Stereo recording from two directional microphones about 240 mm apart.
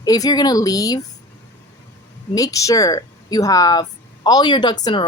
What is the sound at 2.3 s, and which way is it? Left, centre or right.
Speech, centre.